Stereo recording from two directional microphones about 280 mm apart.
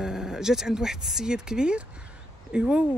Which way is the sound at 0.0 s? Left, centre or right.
Centre.